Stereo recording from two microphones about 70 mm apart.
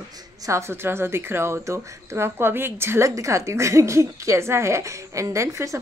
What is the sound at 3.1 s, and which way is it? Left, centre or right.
A woman's voice, right.